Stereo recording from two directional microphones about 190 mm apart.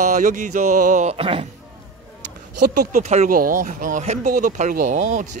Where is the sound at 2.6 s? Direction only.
60° right (ahead or behind).